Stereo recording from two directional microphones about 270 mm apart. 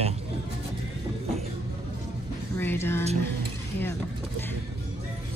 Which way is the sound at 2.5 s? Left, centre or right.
Centre.